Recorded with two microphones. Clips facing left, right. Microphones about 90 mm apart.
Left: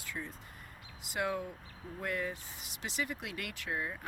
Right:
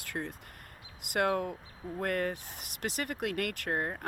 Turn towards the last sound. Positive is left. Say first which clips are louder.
# right 5 dB
turn(degrees=-55)  # may be behind; listen again after turning